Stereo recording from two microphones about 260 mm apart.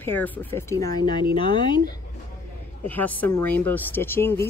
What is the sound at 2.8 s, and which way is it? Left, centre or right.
Speech, centre.